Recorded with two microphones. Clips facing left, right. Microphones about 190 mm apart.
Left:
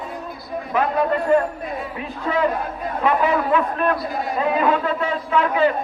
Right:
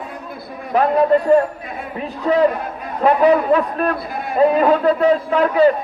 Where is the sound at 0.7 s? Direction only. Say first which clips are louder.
Right 5 dB; 40° right (ahead or behind).